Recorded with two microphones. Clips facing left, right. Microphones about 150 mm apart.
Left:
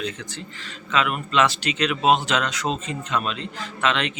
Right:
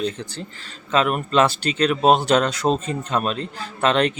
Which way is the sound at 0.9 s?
35° right (ahead or behind).